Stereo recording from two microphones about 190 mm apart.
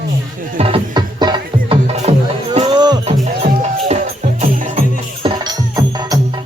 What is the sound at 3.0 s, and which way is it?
Music, 35° right (ahead or behind).